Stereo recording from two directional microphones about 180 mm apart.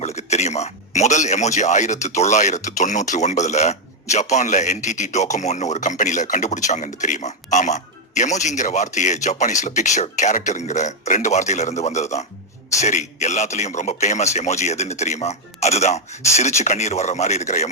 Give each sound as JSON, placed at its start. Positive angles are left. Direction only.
{"t": 0.0, "sound": "a man's voice", "side_deg": 40}